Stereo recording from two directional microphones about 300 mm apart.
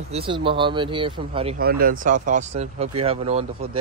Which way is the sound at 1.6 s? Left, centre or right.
Right.